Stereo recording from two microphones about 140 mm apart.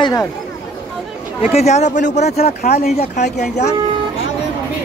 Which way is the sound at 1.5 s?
50° left (ahead or behind).